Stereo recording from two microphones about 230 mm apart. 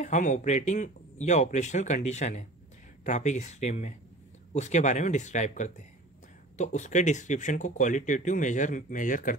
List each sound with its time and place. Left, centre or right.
0.0 s speech: left